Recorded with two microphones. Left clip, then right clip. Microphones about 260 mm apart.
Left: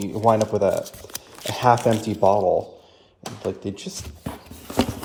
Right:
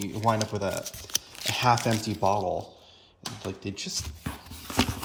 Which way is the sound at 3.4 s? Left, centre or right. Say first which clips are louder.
Left 8 dB; centre.